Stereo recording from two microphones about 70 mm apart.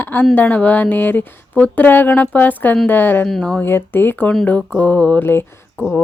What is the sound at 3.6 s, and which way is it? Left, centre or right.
Speech, left.